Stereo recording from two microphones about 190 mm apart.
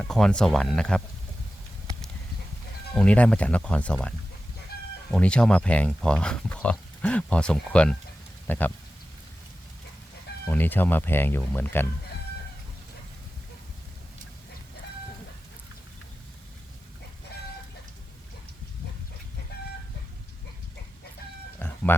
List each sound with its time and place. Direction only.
0.0 s speech: centre (ahead or behind)
2.9 s speech: 5° left (ahead or behind)
4.7 s chicken: 55° left (ahead or behind)
5.1 s speech: 5° left (ahead or behind)
10.4 s speech: 10° left (ahead or behind)
21.9 s speech: 10° left (ahead or behind)